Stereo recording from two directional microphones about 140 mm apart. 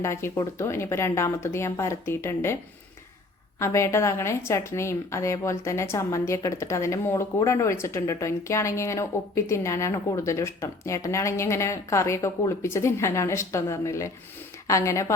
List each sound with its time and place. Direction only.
0.0 s a woman's voice: 20° left (ahead or behind)
3.6 s a woman's voice: 20° left (ahead or behind)